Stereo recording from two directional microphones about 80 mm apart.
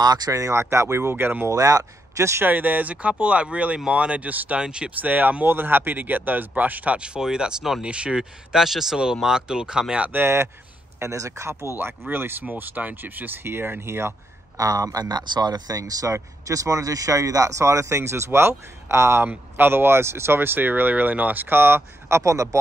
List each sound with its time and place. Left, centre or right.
0.0 s speech: right
1.5 s speech: right
2.4 s speech: right
5.1 s speech: right
10.1 s speech: right
12.1 s speech: right
14.6 s speech: right